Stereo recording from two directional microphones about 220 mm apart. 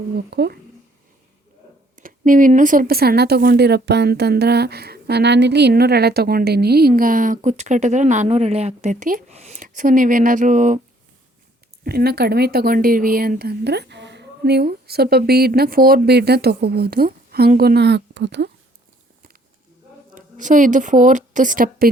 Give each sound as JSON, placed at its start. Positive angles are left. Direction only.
{"t": 0.3, "sound": "speech", "side_deg": -50}
{"t": 2.0, "sound": "speech", "side_deg": -40}
{"t": 11.8, "sound": "speech", "side_deg": -45}
{"t": 20.1, "sound": "speech", "side_deg": -35}